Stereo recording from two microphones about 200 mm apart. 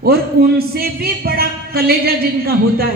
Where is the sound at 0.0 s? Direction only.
50° right (ahead or behind).